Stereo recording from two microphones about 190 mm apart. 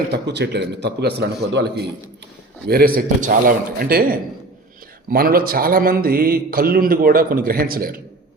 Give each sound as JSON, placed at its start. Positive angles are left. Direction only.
{"t": 0.1, "sound": "a man's voice", "side_deg": -65}